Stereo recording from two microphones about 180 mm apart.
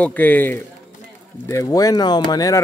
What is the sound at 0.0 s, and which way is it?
Speech, 10° left (ahead or behind).